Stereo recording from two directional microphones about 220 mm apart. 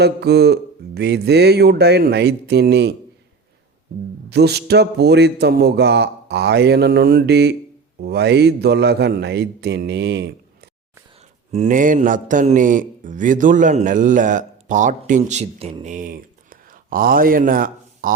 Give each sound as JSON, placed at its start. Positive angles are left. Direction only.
{"t": 0.0, "sound": "a man's voice", "side_deg": -50}
{"t": 4.3, "sound": "a man's voice", "side_deg": -50}
{"t": 11.2, "sound": "mantra", "side_deg": -30}